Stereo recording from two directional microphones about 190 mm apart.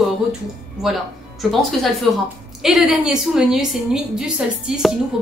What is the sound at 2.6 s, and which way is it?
Speech, 5° right (ahead or behind).